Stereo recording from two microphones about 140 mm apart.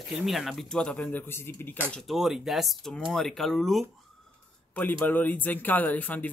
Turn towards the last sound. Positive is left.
turn(degrees=10)  # may be behind; listen again after turning